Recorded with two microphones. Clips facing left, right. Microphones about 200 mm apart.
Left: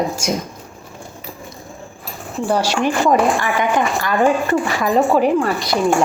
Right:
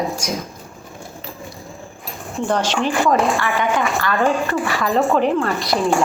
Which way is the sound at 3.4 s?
15° left (ahead or behind).